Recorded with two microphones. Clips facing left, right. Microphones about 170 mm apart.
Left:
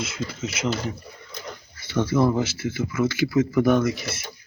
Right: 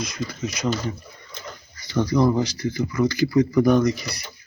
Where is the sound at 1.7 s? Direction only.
5° left (ahead or behind).